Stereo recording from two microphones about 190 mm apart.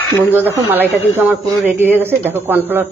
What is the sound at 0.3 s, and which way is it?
Speech, 10° right (ahead or behind).